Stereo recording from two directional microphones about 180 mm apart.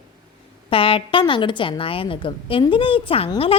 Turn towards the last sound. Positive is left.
turn(degrees=30)  # may be behind; listen again after turning